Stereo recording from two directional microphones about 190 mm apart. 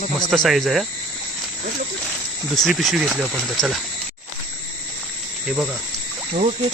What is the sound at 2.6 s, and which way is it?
Speech, centre (ahead or behind).